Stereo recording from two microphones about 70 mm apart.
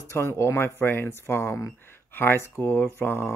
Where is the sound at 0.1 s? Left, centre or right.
Left.